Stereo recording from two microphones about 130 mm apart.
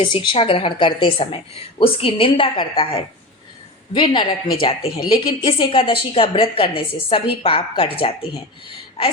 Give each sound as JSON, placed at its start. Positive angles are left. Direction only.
{"t": 0.0, "sound": "a woman's voice", "side_deg": 40}
{"t": 3.9, "sound": "a woman's voice", "side_deg": 35}